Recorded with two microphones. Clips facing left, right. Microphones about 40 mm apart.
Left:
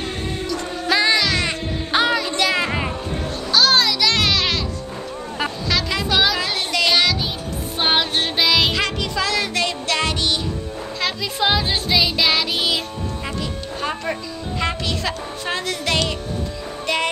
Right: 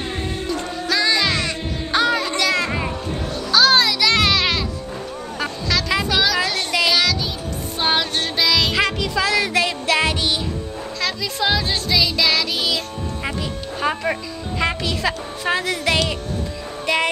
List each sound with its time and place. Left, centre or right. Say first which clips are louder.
0.8 s music: left 1 dB; left
2.2 s children playing: even; centre
3.5 s music: right 1 dB; centre
5.4 s a sound: even; centre
6.7 s music: left 1 dB; centre
7.8 s music: left 1 dB; centre
8.7 s music: right 2 dB; centre
11.0 s child singing: left 1 dB; centre
14.6 s speech: right 2 dB; centre
16.8 s music: right 2 dB; centre